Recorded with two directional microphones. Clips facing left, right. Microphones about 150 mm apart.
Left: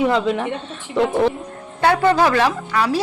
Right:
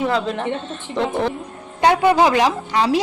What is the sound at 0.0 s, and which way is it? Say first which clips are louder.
Speech: left 3 dB; 5° left (ahead or behind).